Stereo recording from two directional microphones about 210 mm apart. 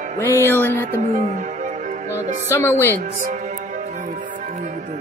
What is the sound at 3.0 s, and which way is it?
Music, 35° right (ahead or behind).